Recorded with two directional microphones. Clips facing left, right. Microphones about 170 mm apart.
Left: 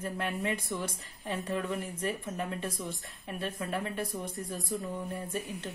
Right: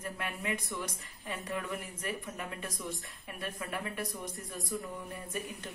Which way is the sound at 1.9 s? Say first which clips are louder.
Left 5 dB; 30° left (ahead or behind).